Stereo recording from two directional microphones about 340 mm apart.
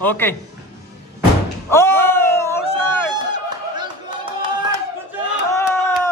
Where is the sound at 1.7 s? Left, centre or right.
Centre.